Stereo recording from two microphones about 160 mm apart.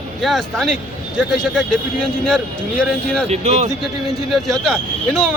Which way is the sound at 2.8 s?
5° left (ahead or behind).